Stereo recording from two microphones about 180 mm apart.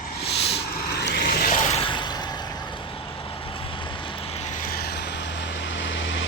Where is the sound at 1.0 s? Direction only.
70° left (ahead or behind); by 2.4 s 25° left (ahead or behind).